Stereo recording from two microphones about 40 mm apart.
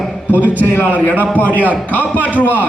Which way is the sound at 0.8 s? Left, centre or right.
Left.